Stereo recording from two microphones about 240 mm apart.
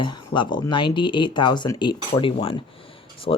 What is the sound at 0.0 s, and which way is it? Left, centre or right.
Speech, centre.